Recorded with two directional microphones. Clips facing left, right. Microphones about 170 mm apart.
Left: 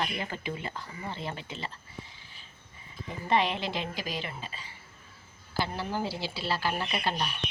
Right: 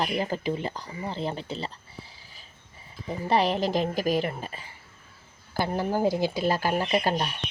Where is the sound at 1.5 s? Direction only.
35° right (ahead or behind).